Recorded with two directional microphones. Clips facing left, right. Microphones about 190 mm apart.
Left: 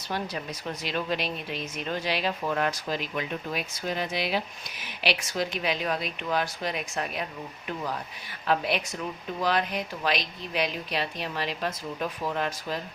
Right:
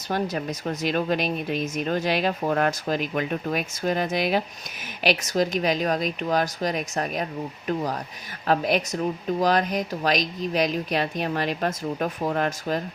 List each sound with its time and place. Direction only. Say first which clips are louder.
0.1 s speech: right 6 dB; 45° right (ahead or behind)